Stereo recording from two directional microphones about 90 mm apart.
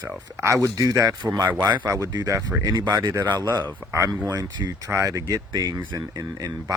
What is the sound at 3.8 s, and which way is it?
Speech, 35° right (ahead or behind).